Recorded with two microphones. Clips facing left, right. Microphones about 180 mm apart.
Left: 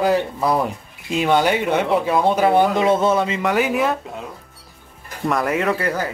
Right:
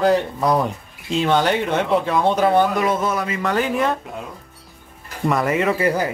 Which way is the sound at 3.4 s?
10° left (ahead or behind).